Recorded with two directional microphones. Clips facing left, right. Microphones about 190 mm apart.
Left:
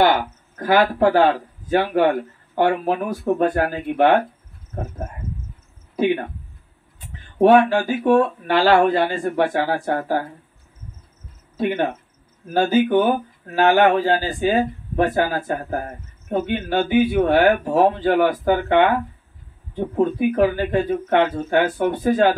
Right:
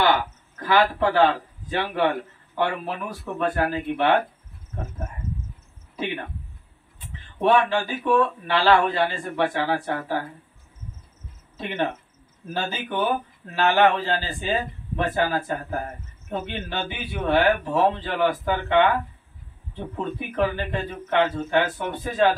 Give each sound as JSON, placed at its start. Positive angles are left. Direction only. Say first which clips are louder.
{"t": 0.6, "sound": "speech", "louder": "left 4 dB", "side_deg": 45}
{"t": 7.3, "sound": "speech", "louder": "left 6 dB", "side_deg": 45}
{"t": 12.5, "sound": "speech", "louder": "left 11 dB", "side_deg": 45}